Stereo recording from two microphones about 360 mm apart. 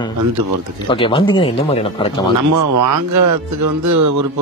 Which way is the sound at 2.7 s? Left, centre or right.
Right.